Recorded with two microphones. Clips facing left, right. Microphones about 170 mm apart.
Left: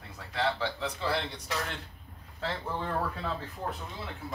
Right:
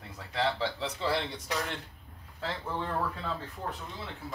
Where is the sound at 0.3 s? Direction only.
25° right (ahead or behind).